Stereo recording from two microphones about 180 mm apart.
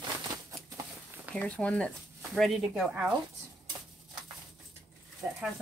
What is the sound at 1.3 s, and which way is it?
Speech, 5° left (ahead or behind).